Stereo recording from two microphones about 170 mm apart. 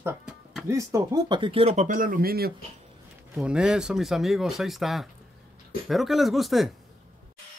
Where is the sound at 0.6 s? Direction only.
20° right (ahead or behind); by 2.5 s 60° right (ahead or behind).